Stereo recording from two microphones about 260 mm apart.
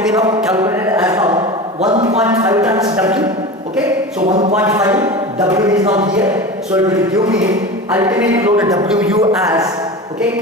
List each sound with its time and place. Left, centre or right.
0.1 s a sound: centre
1.8 s a man's voice: right
2.2 s speech: centre
4.6 s a man's voice: centre